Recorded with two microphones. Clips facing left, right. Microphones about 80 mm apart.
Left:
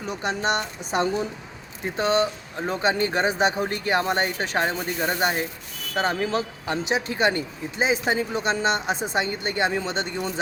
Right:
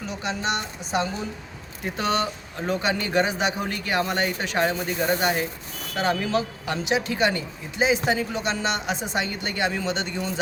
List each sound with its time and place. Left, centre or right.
0.0 s speech: left
2.0 s speech: left